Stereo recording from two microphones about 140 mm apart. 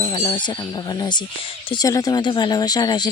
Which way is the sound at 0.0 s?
30° left (ahead or behind).